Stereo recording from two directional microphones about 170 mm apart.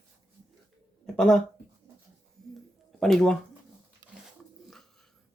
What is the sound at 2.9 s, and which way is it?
Speech, 5° left (ahead or behind).